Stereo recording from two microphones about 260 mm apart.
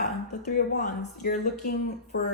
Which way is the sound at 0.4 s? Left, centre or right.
Left.